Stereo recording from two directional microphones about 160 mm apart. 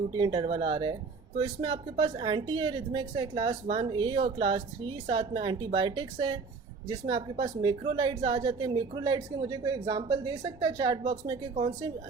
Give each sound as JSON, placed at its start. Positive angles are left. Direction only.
{"t": 0.2, "sound": "a woman's voice", "side_deg": -30}